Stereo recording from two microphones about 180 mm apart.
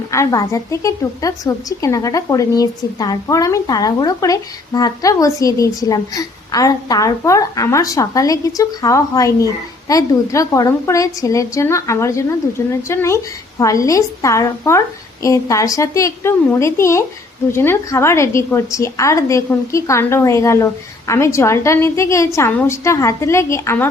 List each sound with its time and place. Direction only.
0.1 s a woman's voice: 15° left (ahead or behind)